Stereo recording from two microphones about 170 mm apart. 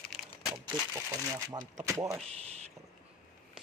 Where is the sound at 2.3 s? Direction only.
40° right (ahead or behind).